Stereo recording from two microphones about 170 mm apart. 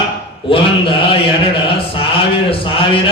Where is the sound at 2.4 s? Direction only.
30° left (ahead or behind).